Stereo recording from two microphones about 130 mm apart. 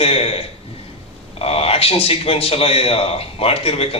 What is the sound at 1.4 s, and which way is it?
A man's voice, 50° left (ahead or behind).